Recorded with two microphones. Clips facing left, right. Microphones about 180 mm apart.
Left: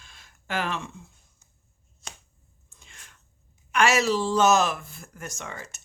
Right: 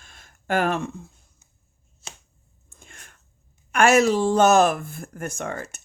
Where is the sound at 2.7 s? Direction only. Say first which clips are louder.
Right 5 dB; 50° right (ahead or behind).